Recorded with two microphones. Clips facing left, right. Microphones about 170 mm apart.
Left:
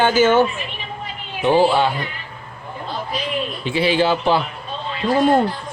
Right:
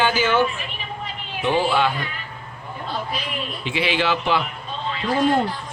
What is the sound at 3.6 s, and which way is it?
Speech, 35° left (ahead or behind).